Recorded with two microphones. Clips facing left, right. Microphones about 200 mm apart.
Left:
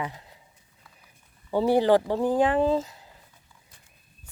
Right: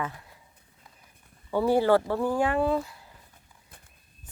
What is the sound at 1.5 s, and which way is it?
Speech, 15° left (ahead or behind).